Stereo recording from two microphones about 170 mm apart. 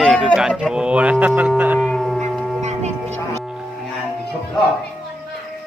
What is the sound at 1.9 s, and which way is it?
Howl, centre (ahead or behind).